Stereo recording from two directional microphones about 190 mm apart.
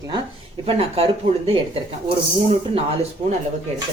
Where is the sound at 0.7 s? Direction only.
30° right (ahead or behind).